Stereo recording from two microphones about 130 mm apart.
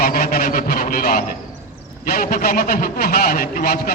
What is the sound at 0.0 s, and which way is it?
A man's voice, 90° left.